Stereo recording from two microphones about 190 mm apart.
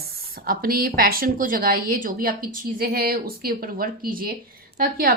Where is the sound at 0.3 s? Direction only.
50° right (ahead or behind).